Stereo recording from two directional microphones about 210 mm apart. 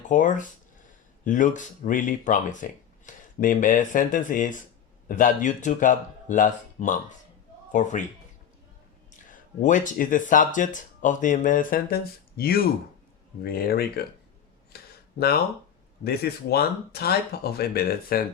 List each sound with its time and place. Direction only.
0.1 s speech: 35° left (ahead or behind)
9.3 s speech: 35° left (ahead or behind)
14.7 s a sound: 50° left (ahead or behind)
16.0 s speech: 50° left (ahead or behind)